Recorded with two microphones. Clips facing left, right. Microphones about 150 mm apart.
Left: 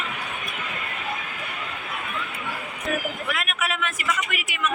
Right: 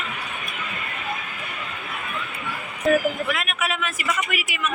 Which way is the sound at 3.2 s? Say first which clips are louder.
Right 2 dB; centre (ahead or behind).